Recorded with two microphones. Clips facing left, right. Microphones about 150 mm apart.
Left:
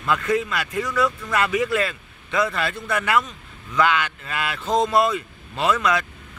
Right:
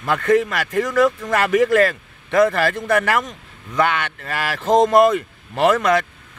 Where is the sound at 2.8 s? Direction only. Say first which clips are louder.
Even; 50° right (ahead or behind).